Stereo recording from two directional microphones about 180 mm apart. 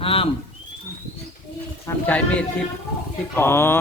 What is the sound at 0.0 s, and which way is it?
Speech, 30° left (ahead or behind).